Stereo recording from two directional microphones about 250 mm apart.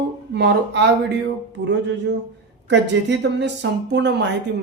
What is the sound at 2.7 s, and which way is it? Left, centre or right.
Speech, right.